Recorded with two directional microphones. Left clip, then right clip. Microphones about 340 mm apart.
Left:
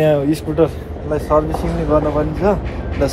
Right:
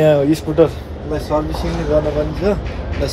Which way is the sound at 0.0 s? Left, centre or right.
Centre.